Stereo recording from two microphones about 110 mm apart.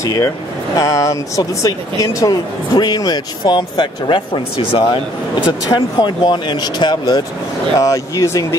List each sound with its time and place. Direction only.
0.0 s speech: 30° left (ahead or behind); by 5.0 s 55° left (ahead or behind)
5.7 s speech: 40° left (ahead or behind)
7.8 s speech: 30° left (ahead or behind)